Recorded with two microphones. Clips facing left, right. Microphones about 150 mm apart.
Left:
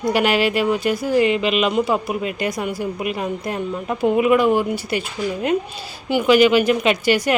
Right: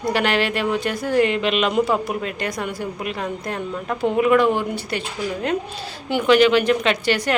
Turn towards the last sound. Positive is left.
turn(degrees=10)  # may be behind; listen again after turning